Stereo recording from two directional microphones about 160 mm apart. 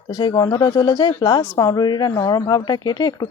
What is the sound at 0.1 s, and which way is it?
Speech, 25° left (ahead or behind).